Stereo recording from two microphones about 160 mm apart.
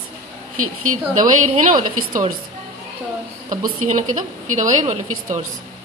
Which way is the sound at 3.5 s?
50° right (ahead or behind).